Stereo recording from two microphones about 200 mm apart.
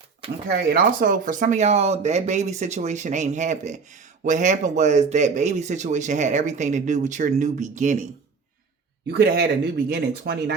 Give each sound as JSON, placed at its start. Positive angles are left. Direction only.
{"t": 0.4, "sound": "a man's voice", "side_deg": -50}
{"t": 9.0, "sound": "speech", "side_deg": -50}